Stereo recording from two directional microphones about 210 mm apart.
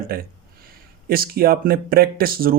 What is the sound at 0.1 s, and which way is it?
Speech, 45° right (ahead or behind).